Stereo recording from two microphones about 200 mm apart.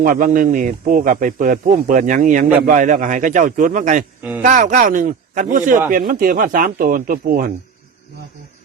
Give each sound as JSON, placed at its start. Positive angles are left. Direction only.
{"t": 0.0, "sound": "speech", "side_deg": -45}